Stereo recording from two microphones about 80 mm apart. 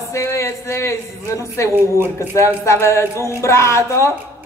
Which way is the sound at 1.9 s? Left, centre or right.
Right.